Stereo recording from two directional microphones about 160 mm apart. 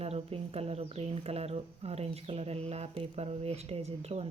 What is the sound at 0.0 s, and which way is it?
Speech, 40° right (ahead or behind).